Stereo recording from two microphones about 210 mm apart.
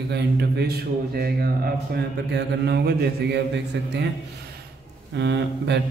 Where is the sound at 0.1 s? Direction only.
50° right (ahead or behind).